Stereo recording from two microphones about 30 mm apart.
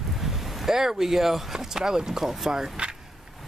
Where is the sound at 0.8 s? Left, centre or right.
Centre.